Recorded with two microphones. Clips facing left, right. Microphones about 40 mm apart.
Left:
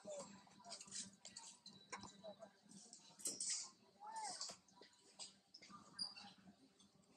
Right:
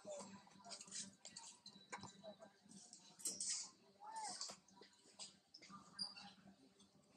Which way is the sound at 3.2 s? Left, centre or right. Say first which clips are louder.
Even; centre.